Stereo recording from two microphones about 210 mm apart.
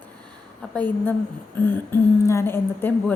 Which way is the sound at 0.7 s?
10° left (ahead or behind).